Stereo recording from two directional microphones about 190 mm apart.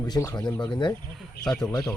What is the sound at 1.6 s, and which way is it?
Speech, 15° left (ahead or behind).